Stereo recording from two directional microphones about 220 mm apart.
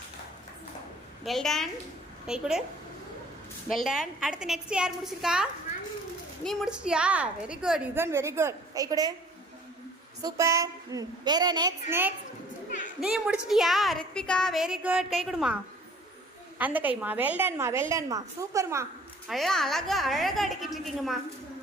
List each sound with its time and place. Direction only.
1.2 s a woman's voice: centre (ahead or behind)
3.7 s a woman's voice: centre (ahead or behind); by 9.1 s 15° right (ahead or behind)
10.2 s a woman's voice: 15° right (ahead or behind)
16.6 s a woman's voice: 5° right (ahead or behind)
19.3 s a woman's voice: centre (ahead or behind)